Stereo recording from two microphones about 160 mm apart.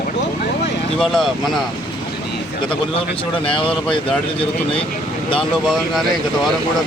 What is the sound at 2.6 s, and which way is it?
Speech, 35° left (ahead or behind).